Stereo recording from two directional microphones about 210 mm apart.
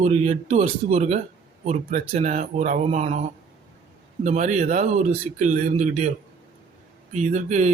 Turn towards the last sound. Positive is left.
turn(degrees=-35)  # may be behind; listen again after turning